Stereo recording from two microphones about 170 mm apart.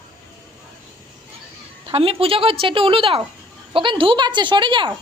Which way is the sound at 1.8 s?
35° right (ahead or behind).